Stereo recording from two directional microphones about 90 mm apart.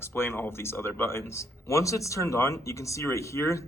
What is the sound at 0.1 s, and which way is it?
Speech, 25° left (ahead or behind).